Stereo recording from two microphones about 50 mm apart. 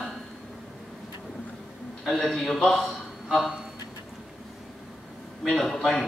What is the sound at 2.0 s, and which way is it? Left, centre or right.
A man's voice, centre.